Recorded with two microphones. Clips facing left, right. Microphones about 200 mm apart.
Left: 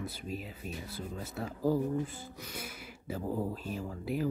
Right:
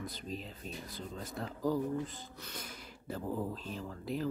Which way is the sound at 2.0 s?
10° left (ahead or behind).